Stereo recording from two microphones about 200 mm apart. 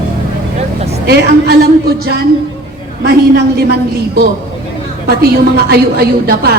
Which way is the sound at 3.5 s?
50° right (ahead or behind).